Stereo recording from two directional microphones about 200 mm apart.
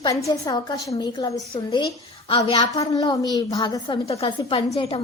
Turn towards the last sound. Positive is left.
turn(degrees=30)  # may be behind; listen again after turning